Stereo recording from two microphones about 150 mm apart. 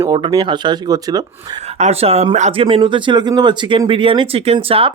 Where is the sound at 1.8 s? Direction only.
45° right (ahead or behind).